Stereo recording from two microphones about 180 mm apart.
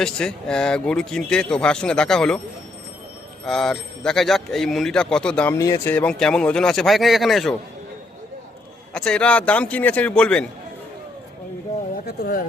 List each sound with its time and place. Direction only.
0.0 s speech: 5° left (ahead or behind)
3.4 s speech: centre (ahead or behind)
5.5 s speech: 20° left (ahead or behind); by 7.5 s centre (ahead or behind)
8.9 s a man's voice: 5° left (ahead or behind)
12.0 s speech: 60° left (ahead or behind)